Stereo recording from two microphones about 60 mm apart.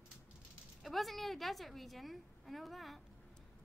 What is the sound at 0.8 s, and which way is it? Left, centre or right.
A woman's voice, centre.